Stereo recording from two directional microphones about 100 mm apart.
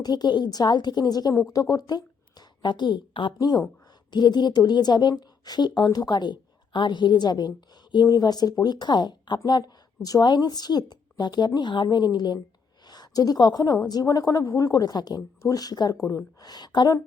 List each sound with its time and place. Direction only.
0.0 s a woman's voice: 45° left (ahead or behind)